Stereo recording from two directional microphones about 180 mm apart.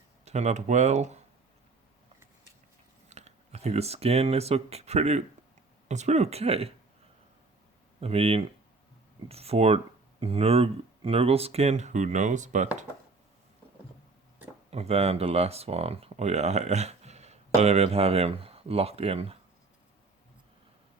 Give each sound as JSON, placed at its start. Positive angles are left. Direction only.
{"t": 0.3, "sound": "speech", "side_deg": -40}
{"t": 3.1, "sound": "speech", "side_deg": -40}
{"t": 8.0, "sound": "speech", "side_deg": -35}
{"t": 14.7, "sound": "speech", "side_deg": -35}